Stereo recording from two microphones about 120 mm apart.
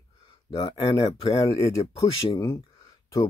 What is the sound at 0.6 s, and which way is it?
Speech, 40° left (ahead or behind).